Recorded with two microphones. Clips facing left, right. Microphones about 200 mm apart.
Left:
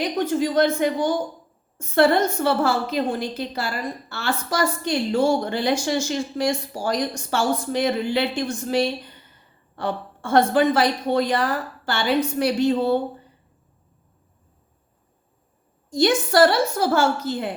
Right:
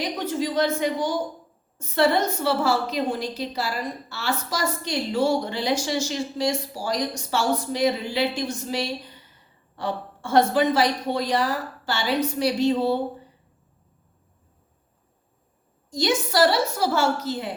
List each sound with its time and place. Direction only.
0.0 s a woman's voice: 55° left (ahead or behind)
16.0 s a woman's voice: 55° left (ahead or behind)